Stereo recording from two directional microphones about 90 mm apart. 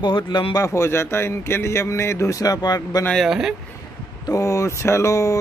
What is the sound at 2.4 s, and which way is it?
Speech, 45° left (ahead or behind).